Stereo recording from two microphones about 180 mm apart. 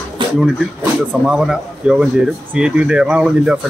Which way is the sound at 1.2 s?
5° right (ahead or behind).